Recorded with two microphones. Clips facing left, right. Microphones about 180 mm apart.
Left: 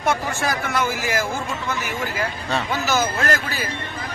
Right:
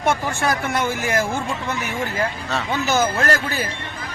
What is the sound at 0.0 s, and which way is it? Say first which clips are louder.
Speech: right 2 dB; 55° right (ahead or behind).